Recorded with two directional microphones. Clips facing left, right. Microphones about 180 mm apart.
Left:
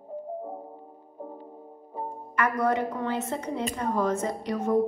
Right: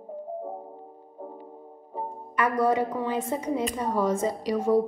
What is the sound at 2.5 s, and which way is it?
A woman's voice, 10° right (ahead or behind).